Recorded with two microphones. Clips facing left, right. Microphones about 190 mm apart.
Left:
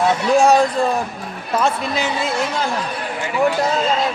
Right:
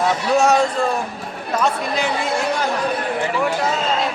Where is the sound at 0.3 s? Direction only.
35° left (ahead or behind).